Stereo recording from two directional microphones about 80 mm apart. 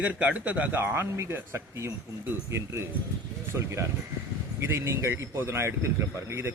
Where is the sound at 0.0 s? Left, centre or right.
Centre.